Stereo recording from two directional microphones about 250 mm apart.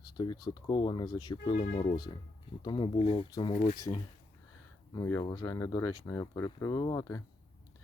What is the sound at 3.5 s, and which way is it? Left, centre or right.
Speech, left.